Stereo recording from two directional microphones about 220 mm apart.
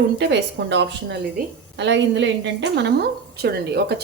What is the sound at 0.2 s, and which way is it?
Speech, 50° right (ahead or behind).